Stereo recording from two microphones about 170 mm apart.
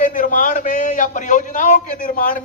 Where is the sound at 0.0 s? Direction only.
50° left (ahead or behind).